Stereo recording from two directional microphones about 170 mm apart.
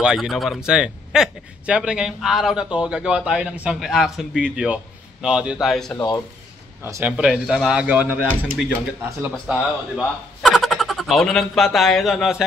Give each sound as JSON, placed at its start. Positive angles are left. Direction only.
{"t": 0.0, "sound": "a man's voice", "side_deg": -5}
{"t": 5.9, "sound": "speech", "side_deg": 25}
{"t": 6.9, "sound": "speech", "side_deg": -10}